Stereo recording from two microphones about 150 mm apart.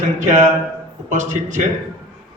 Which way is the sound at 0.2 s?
55° right (ahead or behind).